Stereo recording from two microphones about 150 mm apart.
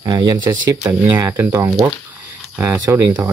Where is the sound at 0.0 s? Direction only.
25° right (ahead or behind).